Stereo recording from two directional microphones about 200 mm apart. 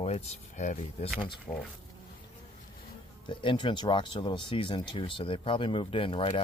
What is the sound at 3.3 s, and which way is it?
Speech, 25° left (ahead or behind).